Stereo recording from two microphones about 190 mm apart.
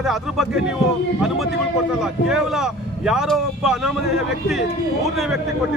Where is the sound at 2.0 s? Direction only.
5° right (ahead or behind).